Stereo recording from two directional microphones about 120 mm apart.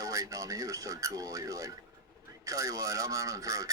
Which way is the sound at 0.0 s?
30° right (ahead or behind).